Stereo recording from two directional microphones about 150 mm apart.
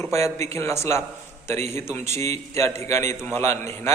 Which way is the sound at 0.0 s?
20° left (ahead or behind).